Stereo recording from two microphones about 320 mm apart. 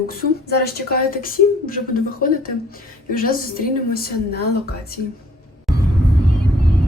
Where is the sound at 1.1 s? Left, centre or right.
Left.